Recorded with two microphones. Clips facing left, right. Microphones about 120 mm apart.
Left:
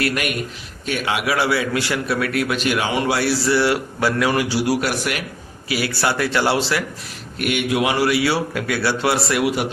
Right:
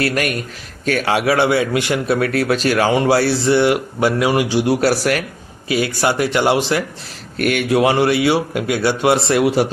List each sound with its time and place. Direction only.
0.0 s speech: 40° right (ahead or behind)
5.6 s speech: 25° right (ahead or behind)
7.3 s speech: 40° right (ahead or behind)